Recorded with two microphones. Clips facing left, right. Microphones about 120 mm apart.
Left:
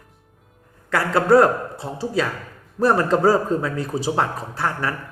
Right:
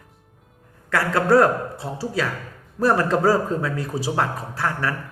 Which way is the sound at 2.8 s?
20° left (ahead or behind).